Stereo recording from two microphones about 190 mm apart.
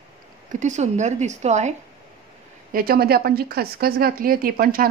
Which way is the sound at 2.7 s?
50° right (ahead or behind).